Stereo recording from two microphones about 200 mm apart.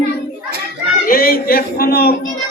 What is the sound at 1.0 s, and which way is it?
Speech, 45° left (ahead or behind).